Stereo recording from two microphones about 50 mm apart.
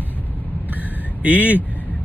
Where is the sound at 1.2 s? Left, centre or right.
Right.